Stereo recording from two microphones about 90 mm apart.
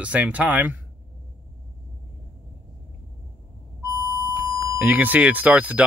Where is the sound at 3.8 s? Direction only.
40° right (ahead or behind).